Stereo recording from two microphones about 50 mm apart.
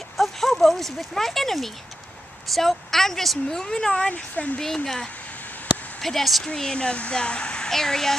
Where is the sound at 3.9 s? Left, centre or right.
Left.